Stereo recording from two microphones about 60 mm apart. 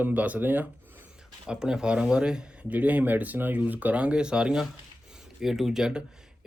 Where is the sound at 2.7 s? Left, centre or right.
Right.